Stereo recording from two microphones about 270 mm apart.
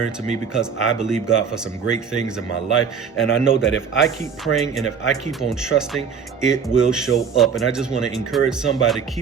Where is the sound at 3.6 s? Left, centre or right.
Left.